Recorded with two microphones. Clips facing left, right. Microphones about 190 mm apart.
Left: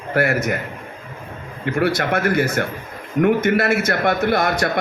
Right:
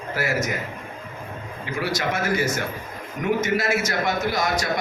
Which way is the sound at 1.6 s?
60° left (ahead or behind).